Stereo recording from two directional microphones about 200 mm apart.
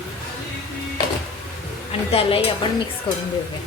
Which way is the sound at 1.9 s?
30° left (ahead or behind).